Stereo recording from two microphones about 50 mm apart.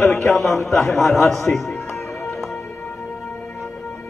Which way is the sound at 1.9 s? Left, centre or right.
Left.